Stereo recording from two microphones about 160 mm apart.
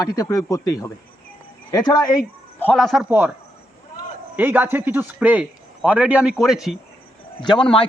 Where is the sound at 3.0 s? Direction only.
10° right (ahead or behind).